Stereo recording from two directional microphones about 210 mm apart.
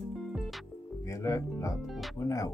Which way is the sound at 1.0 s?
15° left (ahead or behind).